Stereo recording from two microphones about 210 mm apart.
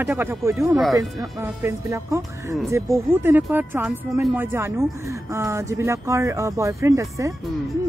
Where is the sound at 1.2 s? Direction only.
15° right (ahead or behind).